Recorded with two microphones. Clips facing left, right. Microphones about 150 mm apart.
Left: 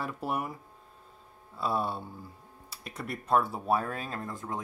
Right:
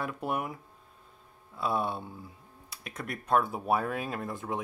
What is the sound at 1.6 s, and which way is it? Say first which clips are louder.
Speech: even; centre (ahead or behind).